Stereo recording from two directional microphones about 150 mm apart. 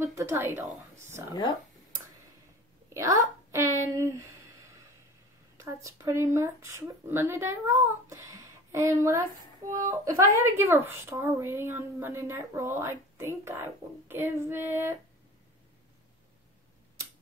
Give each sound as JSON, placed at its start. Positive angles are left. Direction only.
{"t": 0.0, "sound": "a woman's voice", "side_deg": -20}
{"t": 2.9, "sound": "a sound", "side_deg": -20}
{"t": 5.6, "sound": "speech", "side_deg": -20}